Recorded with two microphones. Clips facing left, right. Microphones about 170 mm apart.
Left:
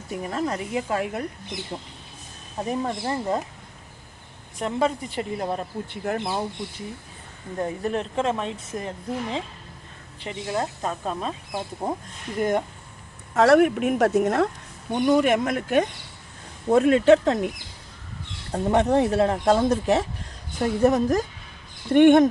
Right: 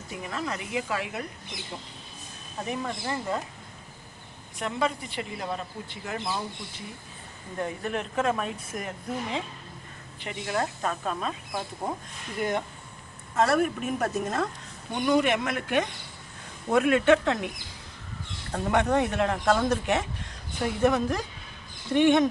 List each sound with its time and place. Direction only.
0.1 s speech: 40° left (ahead or behind)
4.6 s speech: 40° left (ahead or behind)
5.9 s speech: 55° left (ahead or behind)
7.6 s a woman's voice: 35° left (ahead or behind)
12.4 s speech: 40° left (ahead or behind)
13.3 s a woman's voice: 75° left (ahead or behind)
14.9 s speech: 45° left (ahead or behind)
18.5 s speech: 30° left (ahead or behind)
21.9 s speech: 55° left (ahead or behind)